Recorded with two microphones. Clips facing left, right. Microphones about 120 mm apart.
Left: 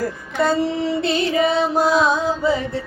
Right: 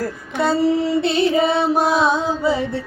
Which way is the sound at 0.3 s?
10° right (ahead or behind).